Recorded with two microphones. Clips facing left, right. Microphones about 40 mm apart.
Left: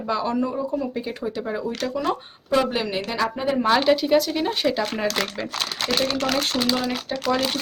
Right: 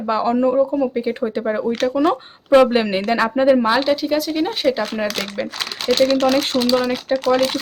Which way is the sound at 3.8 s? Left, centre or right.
Centre.